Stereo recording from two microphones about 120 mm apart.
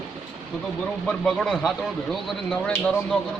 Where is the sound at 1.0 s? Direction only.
5° left (ahead or behind).